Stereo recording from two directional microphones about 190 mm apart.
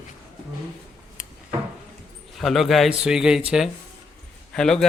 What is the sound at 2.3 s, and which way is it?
Speech, centre (ahead or behind).